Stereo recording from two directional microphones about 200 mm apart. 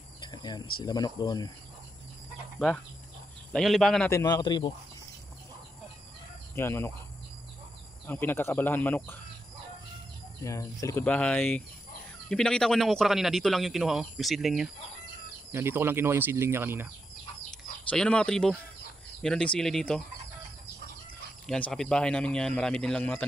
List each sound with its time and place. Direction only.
0.2 s cricket: 20° left (ahead or behind)
0.7 s speech: 20° left (ahead or behind)
2.6 s speech: 5° left (ahead or behind)
4.1 s speech: 20° left (ahead or behind)
6.5 s speech: 10° left (ahead or behind)
8.1 s speech: 10° left (ahead or behind)
10.4 s speech: 15° left (ahead or behind); by 14.7 s centre (ahead or behind)
15.5 s speech: 10° right (ahead or behind)
17.5 s speech: 5° left (ahead or behind)
21.5 s speech: 5° left (ahead or behind)